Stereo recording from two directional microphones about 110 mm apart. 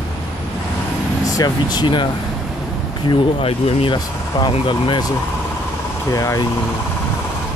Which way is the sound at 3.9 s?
45° left (ahead or behind).